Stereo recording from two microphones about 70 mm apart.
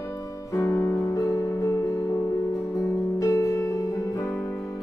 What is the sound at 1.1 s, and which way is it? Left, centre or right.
Music, left.